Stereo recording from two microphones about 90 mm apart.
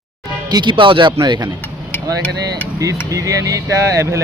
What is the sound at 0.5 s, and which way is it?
Speech, 60° right (ahead or behind).